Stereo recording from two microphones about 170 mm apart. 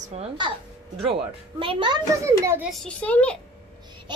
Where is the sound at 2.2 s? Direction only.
15° right (ahead or behind).